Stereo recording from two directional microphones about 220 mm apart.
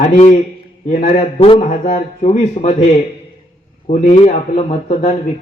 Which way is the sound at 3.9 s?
30° left (ahead or behind).